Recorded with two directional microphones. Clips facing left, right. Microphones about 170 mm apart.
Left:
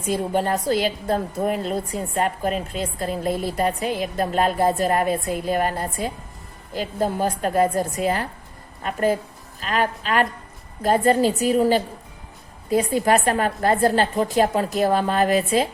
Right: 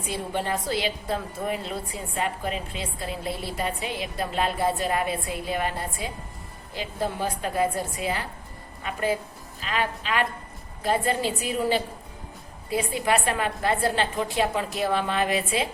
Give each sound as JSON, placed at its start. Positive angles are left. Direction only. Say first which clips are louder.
{"t": 0.1, "sound": "a woman's voice", "louder": "left 7 dB", "side_deg": 45}